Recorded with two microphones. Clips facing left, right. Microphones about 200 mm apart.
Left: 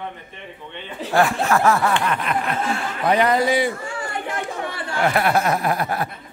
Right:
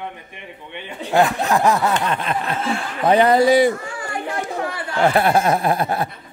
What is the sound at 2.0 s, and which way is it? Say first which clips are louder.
Chuckle: right 1 dB; 25° right (ahead or behind).